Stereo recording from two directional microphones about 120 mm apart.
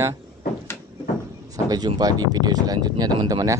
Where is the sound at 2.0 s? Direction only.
35° right (ahead or behind).